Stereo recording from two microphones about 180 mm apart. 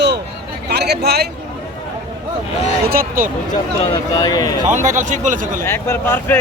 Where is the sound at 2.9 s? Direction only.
55° right (ahead or behind).